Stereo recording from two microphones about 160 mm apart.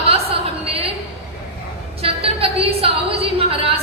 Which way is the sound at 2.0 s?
35° right (ahead or behind).